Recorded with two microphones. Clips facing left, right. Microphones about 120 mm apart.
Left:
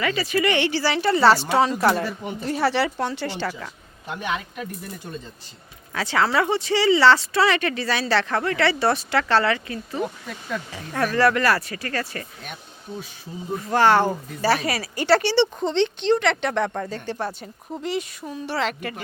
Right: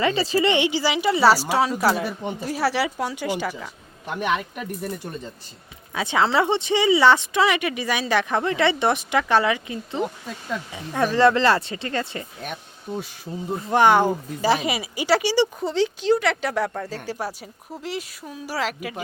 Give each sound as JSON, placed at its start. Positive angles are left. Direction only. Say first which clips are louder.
{"t": 0.0, "sound": "a woman's voice", "louder": "right 2 dB", "side_deg": -30}
{"t": 5.9, "sound": "speech", "louder": "right 1 dB", "side_deg": -15}
{"t": 13.7, "sound": "speech", "louder": "right 1 dB", "side_deg": -15}